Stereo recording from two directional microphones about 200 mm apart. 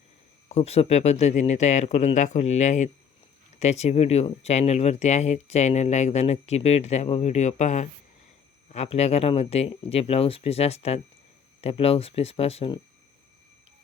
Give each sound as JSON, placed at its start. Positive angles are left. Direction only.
{"t": 0.4, "sound": "speech", "side_deg": 30}